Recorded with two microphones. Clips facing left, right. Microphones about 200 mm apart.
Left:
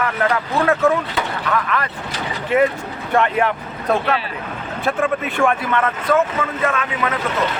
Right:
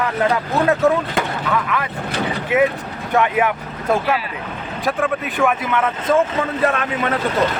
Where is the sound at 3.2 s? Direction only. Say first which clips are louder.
Even; 5° right (ahead or behind).